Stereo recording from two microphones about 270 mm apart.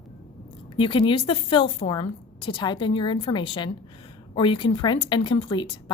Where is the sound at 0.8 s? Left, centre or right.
Centre.